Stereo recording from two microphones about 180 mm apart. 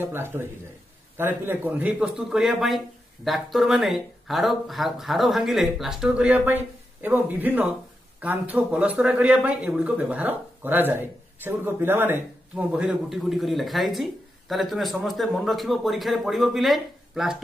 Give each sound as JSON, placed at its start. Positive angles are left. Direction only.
{"t": 0.0, "sound": "speech", "side_deg": -10}